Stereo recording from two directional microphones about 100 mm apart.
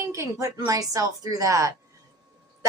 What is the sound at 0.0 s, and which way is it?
Speech, 30° right (ahead or behind).